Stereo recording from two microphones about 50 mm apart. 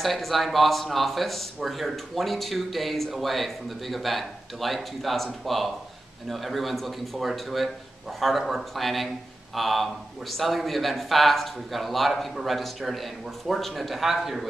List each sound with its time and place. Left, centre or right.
0.0 s speech: centre